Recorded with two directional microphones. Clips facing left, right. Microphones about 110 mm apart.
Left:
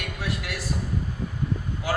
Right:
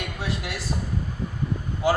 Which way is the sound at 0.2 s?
25° right (ahead or behind).